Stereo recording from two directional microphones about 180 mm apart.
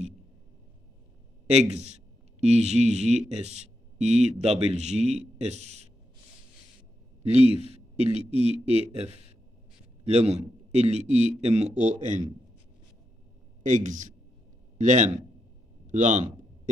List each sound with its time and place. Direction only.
1.5 s speech: 35° right (ahead or behind)
8.0 s speech: 30° left (ahead or behind)
10.0 s speech: 35° right (ahead or behind)
13.6 s speech: 45° right (ahead or behind)